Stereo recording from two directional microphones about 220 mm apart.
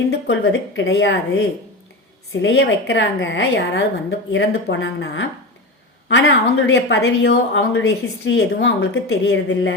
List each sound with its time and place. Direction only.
0.1 s speech: 55° left (ahead or behind)
2.4 s speech: 55° left (ahead or behind)